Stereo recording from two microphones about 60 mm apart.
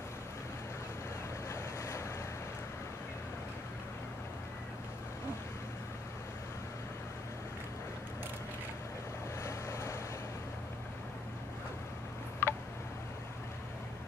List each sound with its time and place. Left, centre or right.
1.5 s waves: left
9.4 s boat: left
12.4 s a sound: left